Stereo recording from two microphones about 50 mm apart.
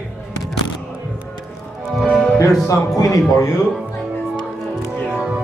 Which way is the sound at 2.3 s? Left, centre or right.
Left.